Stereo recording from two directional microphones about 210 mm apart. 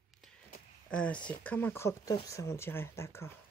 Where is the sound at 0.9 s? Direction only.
5° left (ahead or behind).